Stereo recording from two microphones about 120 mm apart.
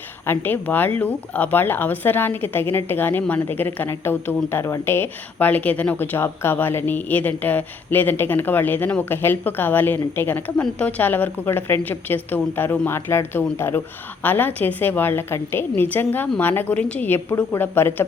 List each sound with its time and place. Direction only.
0.3 s a woman's voice: 15° left (ahead or behind)